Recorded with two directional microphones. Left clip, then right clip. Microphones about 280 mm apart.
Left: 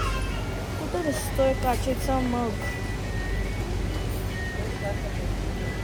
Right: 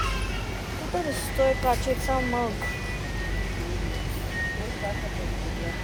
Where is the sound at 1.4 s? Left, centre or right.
Centre.